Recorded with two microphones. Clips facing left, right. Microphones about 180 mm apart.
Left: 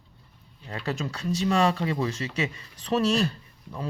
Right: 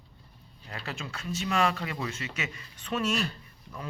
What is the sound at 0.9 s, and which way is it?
Speech, 40° left (ahead or behind).